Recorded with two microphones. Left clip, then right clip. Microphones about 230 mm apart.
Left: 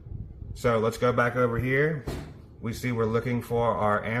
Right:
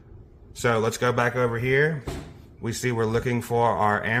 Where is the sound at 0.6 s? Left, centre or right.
Right.